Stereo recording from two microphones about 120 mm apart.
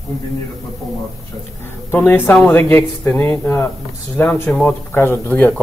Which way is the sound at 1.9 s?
20° left (ahead or behind).